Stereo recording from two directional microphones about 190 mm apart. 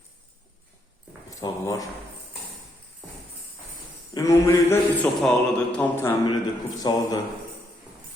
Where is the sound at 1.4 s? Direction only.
15° left (ahead or behind).